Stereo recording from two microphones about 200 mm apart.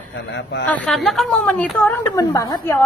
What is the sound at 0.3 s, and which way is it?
Speech, 60° left (ahead or behind).